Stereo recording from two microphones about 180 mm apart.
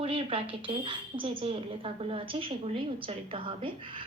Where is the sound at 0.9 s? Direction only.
30° right (ahead or behind).